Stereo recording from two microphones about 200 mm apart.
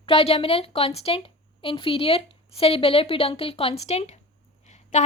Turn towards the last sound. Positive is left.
turn(degrees=35)  # may be behind; listen again after turning